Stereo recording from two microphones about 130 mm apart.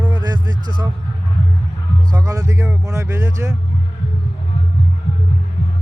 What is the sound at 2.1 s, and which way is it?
Speech, 25° right (ahead or behind).